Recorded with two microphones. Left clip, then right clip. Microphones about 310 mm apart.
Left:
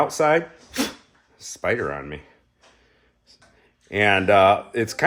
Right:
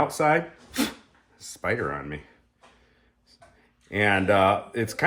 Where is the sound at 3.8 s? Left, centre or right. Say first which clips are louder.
Left 4 dB; left.